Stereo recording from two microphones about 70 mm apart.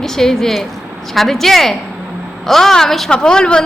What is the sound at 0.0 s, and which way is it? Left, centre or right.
A woman's voice, centre.